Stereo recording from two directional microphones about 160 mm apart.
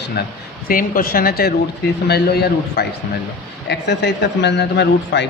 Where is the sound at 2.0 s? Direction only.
90° left.